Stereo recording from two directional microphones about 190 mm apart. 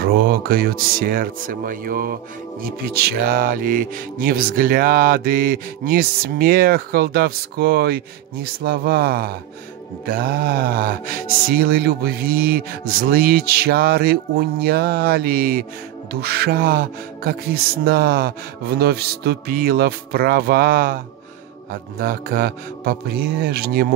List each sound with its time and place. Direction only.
0.0 s speech: 55° right (ahead or behind)